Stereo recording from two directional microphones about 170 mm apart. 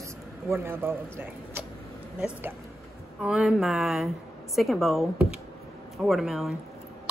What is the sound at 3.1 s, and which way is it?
Speech, 5° right (ahead or behind).